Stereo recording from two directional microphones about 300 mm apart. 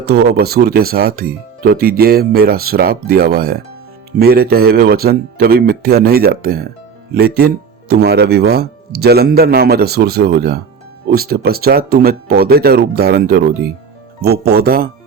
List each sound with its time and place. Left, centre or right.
0.0 s speech: right